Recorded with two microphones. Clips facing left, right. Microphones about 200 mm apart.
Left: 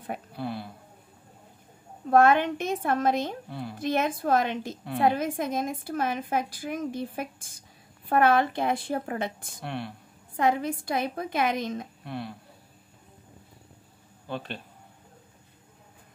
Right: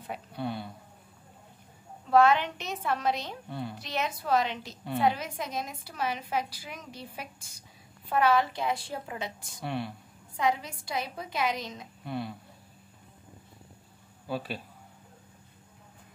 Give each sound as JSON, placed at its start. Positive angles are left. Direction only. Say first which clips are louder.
{"t": 0.3, "sound": "speech", "louder": "right 2 dB", "side_deg": 0}
{"t": 2.0, "sound": "a woman's voice", "louder": "left 2 dB", "side_deg": 50}
{"t": 3.4, "sound": "speech", "louder": "even", "side_deg": 0}
{"t": 3.7, "sound": "a woman's voice", "louder": "left 10 dB", "side_deg": 50}
{"t": 9.6, "sound": "speech", "louder": "right 1 dB", "side_deg": 0}
{"t": 10.3, "sound": "a woman's voice", "louder": "left 4 dB", "side_deg": 55}
{"t": 12.0, "sound": "speech", "louder": "right 1 dB", "side_deg": 0}
{"t": 14.2, "sound": "speech", "louder": "right 1 dB", "side_deg": -5}